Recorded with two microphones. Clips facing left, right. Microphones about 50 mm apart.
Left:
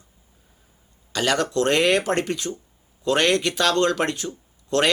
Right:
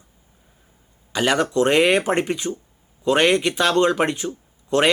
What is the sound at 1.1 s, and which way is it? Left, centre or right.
Speech, centre.